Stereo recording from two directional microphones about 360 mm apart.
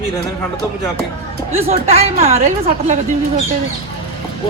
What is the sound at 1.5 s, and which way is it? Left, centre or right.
A woman's voice, centre.